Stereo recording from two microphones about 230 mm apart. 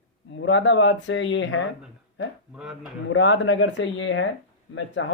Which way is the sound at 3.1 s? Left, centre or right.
Left.